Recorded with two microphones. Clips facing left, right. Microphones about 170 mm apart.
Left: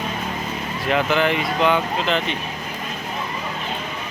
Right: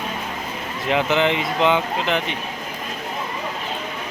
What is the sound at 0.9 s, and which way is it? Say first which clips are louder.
Speech: even; 20° right (ahead or behind).